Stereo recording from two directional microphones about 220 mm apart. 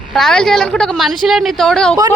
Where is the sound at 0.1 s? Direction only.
Centre (ahead or behind).